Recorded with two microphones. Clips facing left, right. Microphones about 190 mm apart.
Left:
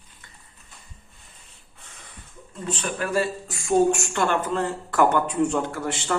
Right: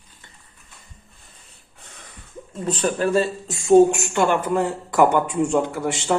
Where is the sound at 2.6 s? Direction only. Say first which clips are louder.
Right 7 dB; 35° right (ahead or behind).